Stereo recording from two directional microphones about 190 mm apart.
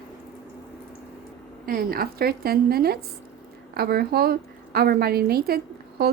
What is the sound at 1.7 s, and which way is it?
A woman's voice, 50° right (ahead or behind).